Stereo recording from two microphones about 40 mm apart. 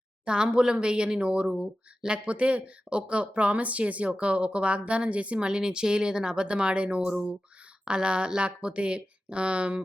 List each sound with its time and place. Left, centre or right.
0.3 s speech: right
5.5 s speech: centre